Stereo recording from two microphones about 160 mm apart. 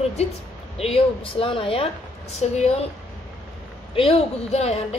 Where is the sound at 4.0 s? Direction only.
35° left (ahead or behind).